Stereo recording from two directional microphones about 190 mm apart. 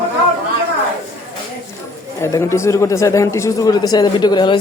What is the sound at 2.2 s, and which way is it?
A man's voice, 15° left (ahead or behind).